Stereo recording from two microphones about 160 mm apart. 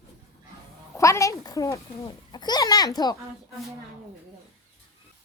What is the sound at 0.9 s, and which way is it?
A child's voice, 20° left (ahead or behind).